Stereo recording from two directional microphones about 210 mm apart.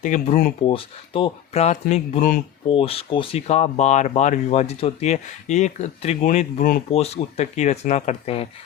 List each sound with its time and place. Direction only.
0.0 s speech: 35° left (ahead or behind)
0.7 s speech: 25° left (ahead or behind)
2.6 s speech: 25° left (ahead or behind)
6.9 s speech: 30° left (ahead or behind)